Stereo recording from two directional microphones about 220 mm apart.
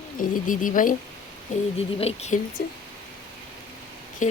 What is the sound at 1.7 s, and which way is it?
Speech, 25° left (ahead or behind).